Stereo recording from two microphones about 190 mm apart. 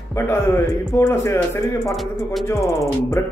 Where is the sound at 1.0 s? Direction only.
15° left (ahead or behind).